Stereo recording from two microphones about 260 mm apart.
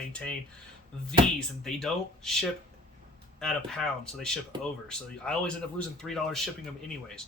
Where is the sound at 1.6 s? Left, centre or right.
Centre.